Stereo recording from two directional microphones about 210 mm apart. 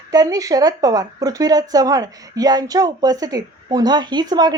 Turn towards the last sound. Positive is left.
turn(degrees=-20)  # may be behind; listen again after turning